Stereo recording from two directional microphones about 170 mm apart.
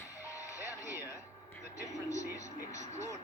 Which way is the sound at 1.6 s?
45° right (ahead or behind).